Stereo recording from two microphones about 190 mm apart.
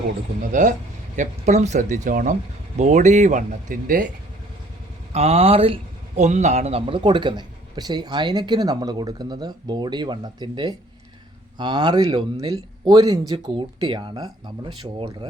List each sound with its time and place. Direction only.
0.5 s speech: 40° right (ahead or behind)
5.1 s speech: 30° right (ahead or behind)